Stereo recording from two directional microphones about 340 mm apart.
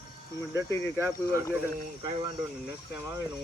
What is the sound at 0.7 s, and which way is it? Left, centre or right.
Speech, centre.